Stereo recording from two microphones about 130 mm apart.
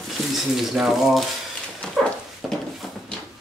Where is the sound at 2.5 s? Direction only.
5° left (ahead or behind).